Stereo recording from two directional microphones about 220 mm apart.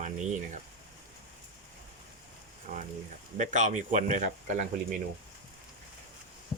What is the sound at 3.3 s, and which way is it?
Speech, 35° right (ahead or behind).